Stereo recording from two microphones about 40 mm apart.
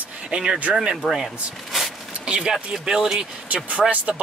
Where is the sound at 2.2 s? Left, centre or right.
Right.